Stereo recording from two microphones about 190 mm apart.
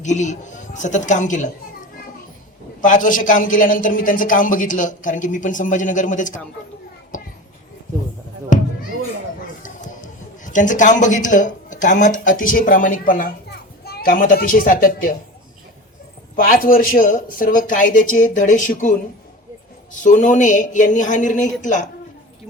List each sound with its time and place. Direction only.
0.0 s speech: 40° left (ahead or behind)
2.8 s a man's voice: 45° left (ahead or behind)
7.1 s children playing: 40° left (ahead or behind)
8.5 s basketball bounce: 40° left (ahead or behind)
10.4 s a man's voice: 40° left (ahead or behind)
16.3 s a man's voice: 50° left (ahead or behind)